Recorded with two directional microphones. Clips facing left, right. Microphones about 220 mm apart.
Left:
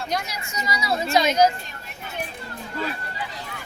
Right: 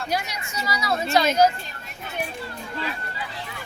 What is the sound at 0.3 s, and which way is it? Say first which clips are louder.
Speech: even; 15° left (ahead or behind).